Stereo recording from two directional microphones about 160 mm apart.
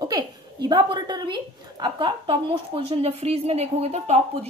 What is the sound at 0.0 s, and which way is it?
A woman's voice, 25° right (ahead or behind).